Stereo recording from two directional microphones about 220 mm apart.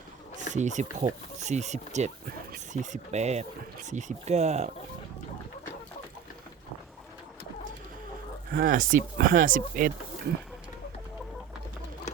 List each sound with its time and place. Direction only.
0.5 s speech: 35° right (ahead or behind)
8.4 s speech: 40° right (ahead or behind)